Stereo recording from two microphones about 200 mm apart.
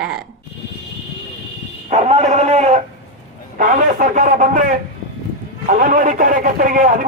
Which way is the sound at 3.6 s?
40° right (ahead or behind).